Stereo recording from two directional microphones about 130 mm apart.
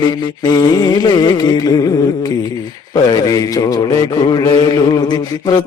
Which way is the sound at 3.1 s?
30° left (ahead or behind).